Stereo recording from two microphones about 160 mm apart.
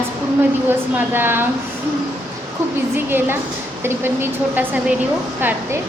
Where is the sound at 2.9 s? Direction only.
15° right (ahead or behind).